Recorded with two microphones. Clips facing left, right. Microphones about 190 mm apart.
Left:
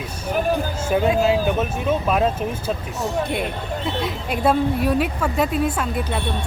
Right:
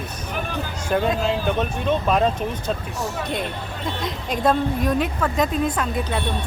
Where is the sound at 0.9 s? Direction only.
5° left (ahead or behind).